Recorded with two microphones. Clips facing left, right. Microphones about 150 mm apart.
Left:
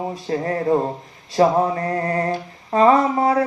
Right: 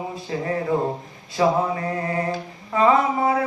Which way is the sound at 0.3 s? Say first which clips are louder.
Left 4 dB; 40° left (ahead or behind).